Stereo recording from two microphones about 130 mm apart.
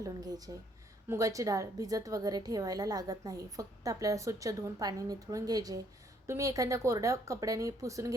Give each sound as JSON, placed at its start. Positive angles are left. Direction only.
{"t": 0.0, "sound": "a woman's voice", "side_deg": -30}